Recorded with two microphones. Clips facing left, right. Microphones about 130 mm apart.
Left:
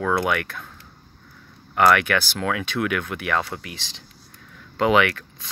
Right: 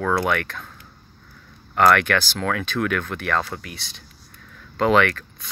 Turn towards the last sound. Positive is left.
turn(degrees=15)  # may be behind; listen again after turning